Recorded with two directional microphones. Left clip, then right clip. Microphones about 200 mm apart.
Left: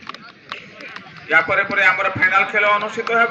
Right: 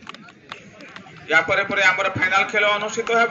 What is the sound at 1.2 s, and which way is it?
A man's voice, 55° right (ahead or behind).